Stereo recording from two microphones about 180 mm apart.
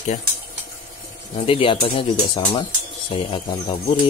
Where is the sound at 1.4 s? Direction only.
30° left (ahead or behind).